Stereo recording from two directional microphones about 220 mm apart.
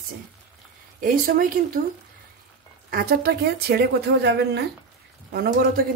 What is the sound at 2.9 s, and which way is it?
Speech, 45° right (ahead or behind).